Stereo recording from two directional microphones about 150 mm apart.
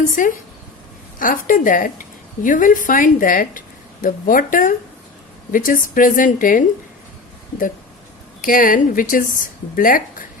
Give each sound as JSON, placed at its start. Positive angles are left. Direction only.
{"t": 0.0, "sound": "a woman's voice", "side_deg": 60}
{"t": 5.5, "sound": "a woman's voice", "side_deg": 65}
{"t": 8.4, "sound": "a woman's voice", "side_deg": 70}